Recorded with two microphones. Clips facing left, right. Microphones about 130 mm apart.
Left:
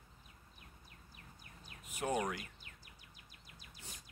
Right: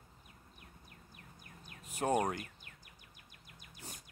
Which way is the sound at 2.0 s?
40° right (ahead or behind).